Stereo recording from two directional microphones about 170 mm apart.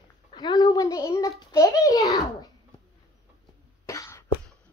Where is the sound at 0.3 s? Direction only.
25° left (ahead or behind).